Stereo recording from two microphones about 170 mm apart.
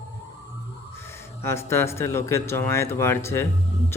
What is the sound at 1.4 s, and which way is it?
Speech, 15° left (ahead or behind).